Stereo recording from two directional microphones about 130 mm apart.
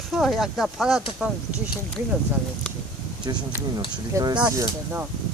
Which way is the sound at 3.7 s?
35° right (ahead or behind).